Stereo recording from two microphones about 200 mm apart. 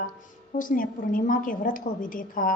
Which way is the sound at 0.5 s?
40° left (ahead or behind).